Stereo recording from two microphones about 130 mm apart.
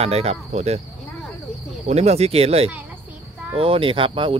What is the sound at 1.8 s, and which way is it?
Speech, 55° right (ahead or behind).